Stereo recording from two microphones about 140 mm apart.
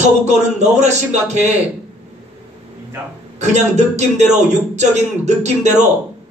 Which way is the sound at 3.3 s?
55° right (ahead or behind).